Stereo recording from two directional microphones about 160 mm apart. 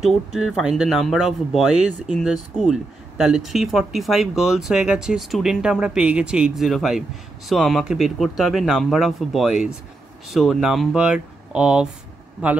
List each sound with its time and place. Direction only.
0.0 s a man's voice: centre (ahead or behind)